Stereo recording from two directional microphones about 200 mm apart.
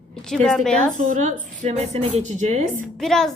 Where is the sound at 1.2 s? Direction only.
40° right (ahead or behind).